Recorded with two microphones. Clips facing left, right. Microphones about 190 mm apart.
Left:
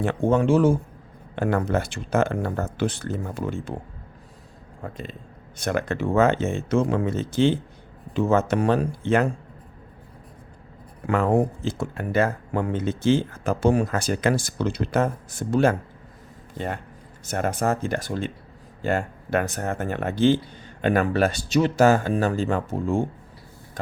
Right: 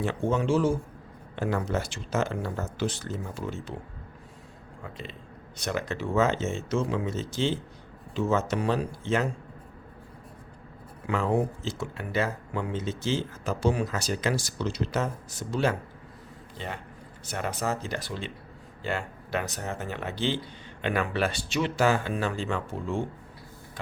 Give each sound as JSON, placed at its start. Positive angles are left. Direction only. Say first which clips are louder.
{"t": 0.0, "sound": "speech", "louder": "left 6 dB", "side_deg": 55}
{"t": 4.8, "sound": "speech", "louder": "left 6 dB", "side_deg": 45}
{"t": 11.0, "sound": "speech", "louder": "left 5 dB", "side_deg": 50}